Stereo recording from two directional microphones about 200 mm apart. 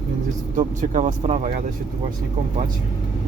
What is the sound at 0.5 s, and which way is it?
Speech, 40° right (ahead or behind).